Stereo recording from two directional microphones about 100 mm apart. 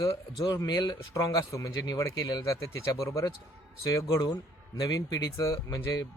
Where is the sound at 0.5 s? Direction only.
40° left (ahead or behind).